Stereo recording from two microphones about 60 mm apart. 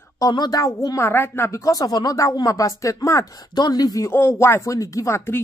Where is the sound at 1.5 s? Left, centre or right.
Left.